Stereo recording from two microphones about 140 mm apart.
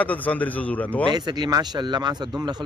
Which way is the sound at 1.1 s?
30° right (ahead or behind).